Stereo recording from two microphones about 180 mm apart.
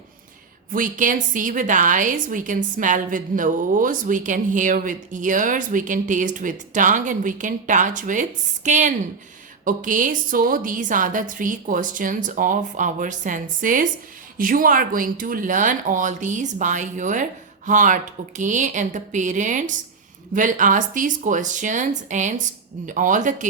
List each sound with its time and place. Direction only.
0.7 s a woman's voice: 50° right (ahead or behind)